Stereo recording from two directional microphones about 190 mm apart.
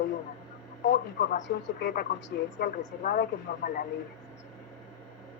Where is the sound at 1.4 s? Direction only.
55° left (ahead or behind).